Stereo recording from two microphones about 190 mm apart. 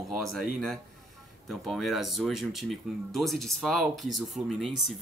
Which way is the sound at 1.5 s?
Centre (ahead or behind).